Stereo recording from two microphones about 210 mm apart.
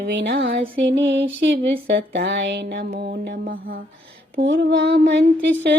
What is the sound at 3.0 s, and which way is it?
Mantra, 50° right (ahead or behind).